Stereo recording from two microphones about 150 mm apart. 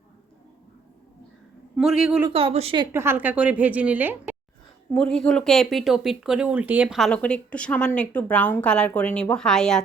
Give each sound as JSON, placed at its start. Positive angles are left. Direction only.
{"t": 1.7, "sound": "speech", "side_deg": -5}
{"t": 2.3, "sound": "a woman's voice", "side_deg": -40}
{"t": 2.9, "sound": "a woman's voice", "side_deg": -15}
{"t": 4.9, "sound": "speech", "side_deg": 5}